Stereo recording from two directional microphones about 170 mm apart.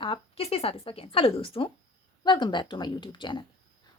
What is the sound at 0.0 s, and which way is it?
A woman's voice, 35° left (ahead or behind).